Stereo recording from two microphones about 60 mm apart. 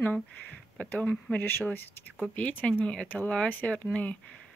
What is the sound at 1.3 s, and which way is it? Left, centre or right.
Speech, left.